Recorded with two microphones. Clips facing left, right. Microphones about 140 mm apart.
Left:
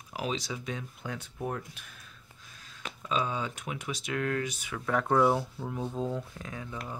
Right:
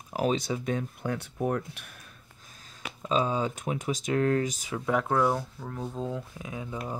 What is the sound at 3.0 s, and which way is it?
Speech, 35° right (ahead or behind).